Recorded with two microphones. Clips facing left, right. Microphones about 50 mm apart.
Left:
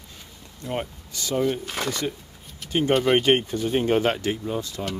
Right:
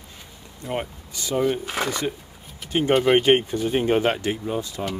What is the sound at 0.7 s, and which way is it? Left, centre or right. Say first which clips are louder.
Speech: right 1 dB; right.